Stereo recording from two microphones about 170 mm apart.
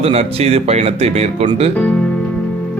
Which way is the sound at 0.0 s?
35° right (ahead or behind).